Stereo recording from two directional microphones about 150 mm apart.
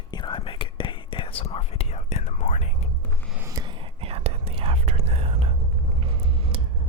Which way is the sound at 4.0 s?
40° right (ahead or behind).